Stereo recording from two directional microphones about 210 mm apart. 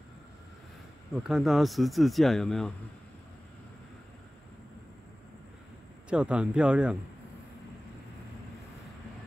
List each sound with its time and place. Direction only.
1.1 s speech: 5° right (ahead or behind)
6.0 s speech: 5° right (ahead or behind)